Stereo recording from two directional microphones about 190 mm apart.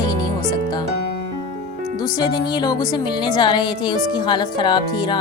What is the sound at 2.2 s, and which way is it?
Speech, 20° left (ahead or behind).